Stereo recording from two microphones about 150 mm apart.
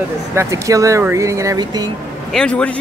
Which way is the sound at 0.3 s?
20° right (ahead or behind).